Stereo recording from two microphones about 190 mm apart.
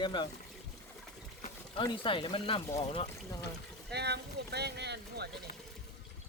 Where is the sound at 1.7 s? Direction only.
25° left (ahead or behind).